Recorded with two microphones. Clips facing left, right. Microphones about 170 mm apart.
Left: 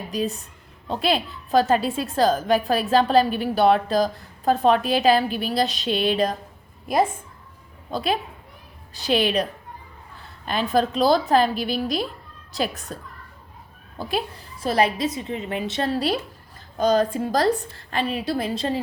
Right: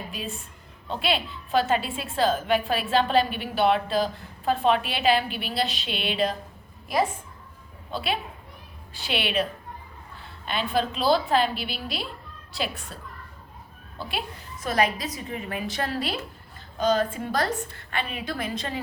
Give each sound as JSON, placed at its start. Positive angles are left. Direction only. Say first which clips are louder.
{"t": 0.1, "sound": "a woman's voice", "louder": "left 9 dB", "side_deg": 40}
{"t": 7.9, "sound": "a woman's voice", "louder": "left 5 dB", "side_deg": 40}
{"t": 14.0, "sound": "a woman's voice", "louder": "left 6 dB", "side_deg": 40}